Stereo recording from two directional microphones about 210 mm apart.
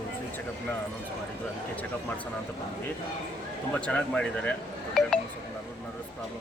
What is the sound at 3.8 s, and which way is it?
Speech, 5° left (ahead or behind).